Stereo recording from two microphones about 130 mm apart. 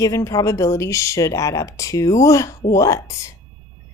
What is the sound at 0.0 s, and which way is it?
Speech, 25° left (ahead or behind).